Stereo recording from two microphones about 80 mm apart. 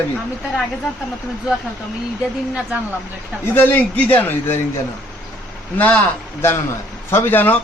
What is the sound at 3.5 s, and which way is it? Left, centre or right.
Speech, left.